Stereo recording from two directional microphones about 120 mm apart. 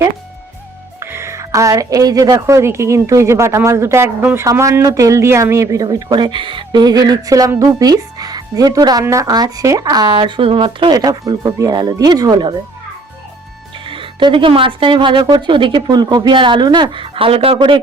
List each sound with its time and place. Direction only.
0.9 s a woman's voice: 20° right (ahead or behind)
13.8 s a woman's voice: 45° right (ahead or behind)